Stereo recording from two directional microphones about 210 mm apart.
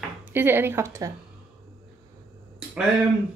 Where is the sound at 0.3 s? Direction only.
10° right (ahead or behind).